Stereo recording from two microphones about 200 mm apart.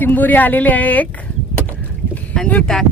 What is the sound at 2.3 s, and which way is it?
Speech, 5° left (ahead or behind).